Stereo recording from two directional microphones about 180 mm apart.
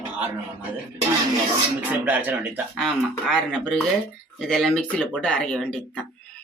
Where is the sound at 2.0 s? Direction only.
10° right (ahead or behind).